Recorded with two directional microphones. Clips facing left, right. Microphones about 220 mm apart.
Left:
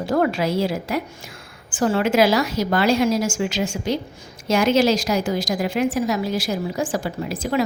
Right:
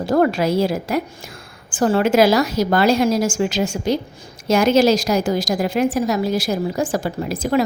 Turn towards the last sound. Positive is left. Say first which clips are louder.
# right 3 dB
turn(degrees=-40)  # may be behind; listen again after turning